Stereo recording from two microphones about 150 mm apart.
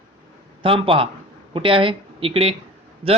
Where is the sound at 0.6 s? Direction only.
35° right (ahead or behind).